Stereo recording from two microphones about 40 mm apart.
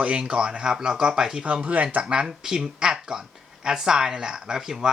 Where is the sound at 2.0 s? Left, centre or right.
Right.